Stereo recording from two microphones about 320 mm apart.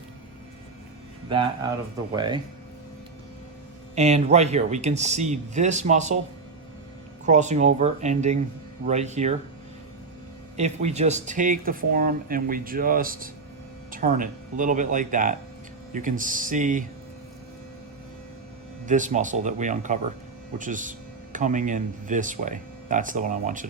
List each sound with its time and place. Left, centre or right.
1.3 s speech: centre
3.9 s speech: centre
7.3 s speech: right
10.6 s speech: right
18.9 s speech: right